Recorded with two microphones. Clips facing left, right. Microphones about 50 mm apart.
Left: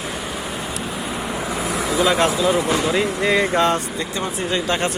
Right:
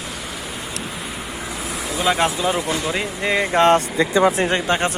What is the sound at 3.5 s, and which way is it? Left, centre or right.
Speech, right.